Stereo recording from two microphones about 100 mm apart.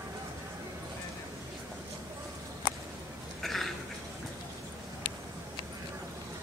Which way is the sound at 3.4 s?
Centre (ahead or behind).